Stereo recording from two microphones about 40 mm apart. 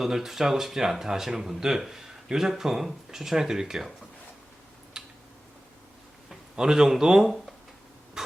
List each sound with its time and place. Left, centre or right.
0.0 s speech: centre
4.9 s a sound: centre
6.6 s speech: centre